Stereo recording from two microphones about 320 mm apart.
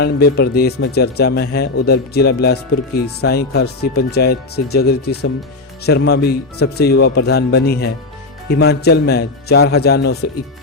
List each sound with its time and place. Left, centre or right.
0.0 s speech: left